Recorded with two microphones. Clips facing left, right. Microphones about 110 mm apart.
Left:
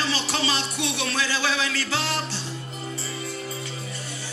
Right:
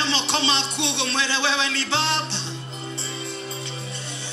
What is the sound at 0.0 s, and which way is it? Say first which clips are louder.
Music: right 2 dB; 25° right (ahead or behind).